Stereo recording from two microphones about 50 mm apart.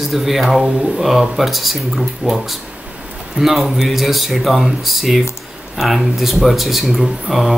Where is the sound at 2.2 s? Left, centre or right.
Centre.